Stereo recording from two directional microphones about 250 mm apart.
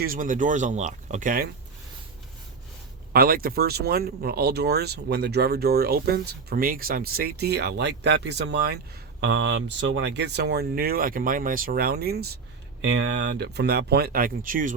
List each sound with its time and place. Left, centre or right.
0.0 s speech: right
3.1 s speech: right